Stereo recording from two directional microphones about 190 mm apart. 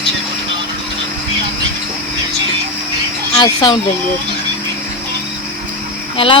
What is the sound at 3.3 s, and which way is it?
Speech, 20° left (ahead or behind).